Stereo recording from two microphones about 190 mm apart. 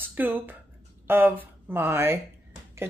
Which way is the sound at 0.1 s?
10° right (ahead or behind).